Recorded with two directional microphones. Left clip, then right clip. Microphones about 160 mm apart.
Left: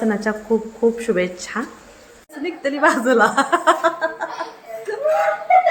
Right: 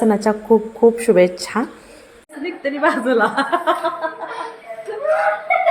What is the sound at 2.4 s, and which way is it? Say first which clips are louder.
Speech: left 1 dB; 5° left (ahead or behind).